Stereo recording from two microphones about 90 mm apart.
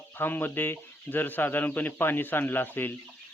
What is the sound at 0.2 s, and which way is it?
Speech, 20° left (ahead or behind).